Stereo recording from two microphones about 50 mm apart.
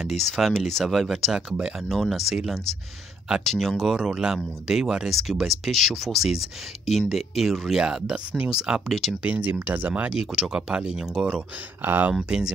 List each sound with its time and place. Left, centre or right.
0.0 s speech: centre
5.1 s speech: centre
7.8 s speech: centre
8.8 s speech: centre
9.2 s speech: right
10.0 s speech: centre
11.8 s speech: right
12.2 s speech: centre